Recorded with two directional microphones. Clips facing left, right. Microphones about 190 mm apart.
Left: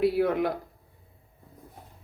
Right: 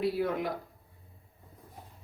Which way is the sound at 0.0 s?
65° left (ahead or behind).